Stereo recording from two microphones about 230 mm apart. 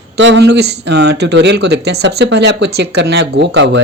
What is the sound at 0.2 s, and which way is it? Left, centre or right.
Speech, right.